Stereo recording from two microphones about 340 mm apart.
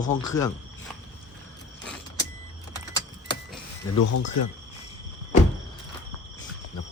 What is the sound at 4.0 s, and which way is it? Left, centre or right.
Speech, left.